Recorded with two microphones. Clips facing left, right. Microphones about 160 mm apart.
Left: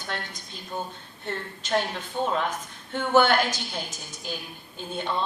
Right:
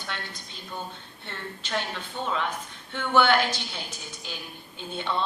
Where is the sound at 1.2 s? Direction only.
45° left (ahead or behind).